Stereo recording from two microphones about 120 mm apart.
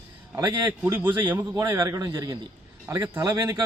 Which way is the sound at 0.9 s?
15° right (ahead or behind).